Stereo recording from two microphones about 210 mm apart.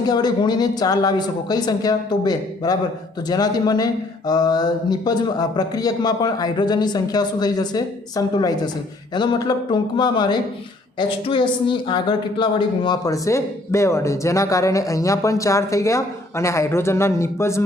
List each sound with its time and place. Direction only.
0.0 s a woman's voice: 20° left (ahead or behind)